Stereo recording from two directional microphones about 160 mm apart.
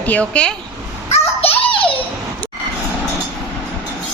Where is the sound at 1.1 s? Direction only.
35° left (ahead or behind).